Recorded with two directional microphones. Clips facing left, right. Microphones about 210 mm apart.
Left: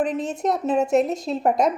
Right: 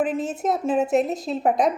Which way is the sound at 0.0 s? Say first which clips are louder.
Even; 5° right (ahead or behind).